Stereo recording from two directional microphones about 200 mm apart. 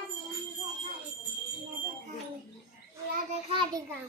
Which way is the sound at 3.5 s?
25° right (ahead or behind).